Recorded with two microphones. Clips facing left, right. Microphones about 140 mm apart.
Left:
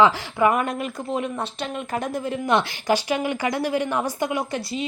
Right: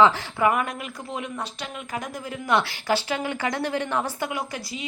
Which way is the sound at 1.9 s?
25° left (ahead or behind).